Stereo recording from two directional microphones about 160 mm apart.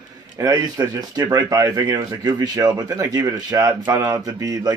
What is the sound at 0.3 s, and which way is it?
Speech, 20° right (ahead or behind).